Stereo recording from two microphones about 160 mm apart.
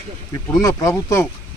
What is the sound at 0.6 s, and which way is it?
Speech, 20° left (ahead or behind).